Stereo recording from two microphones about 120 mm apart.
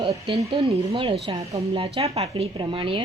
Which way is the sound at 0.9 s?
50° right (ahead or behind).